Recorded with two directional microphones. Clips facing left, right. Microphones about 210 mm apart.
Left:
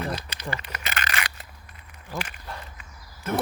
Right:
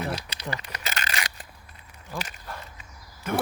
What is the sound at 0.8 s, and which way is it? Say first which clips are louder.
Crumpling: left 1 dB; 35° right (ahead or behind).